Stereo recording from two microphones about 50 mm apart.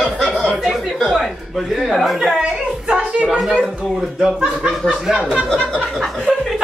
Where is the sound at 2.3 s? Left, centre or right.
Centre.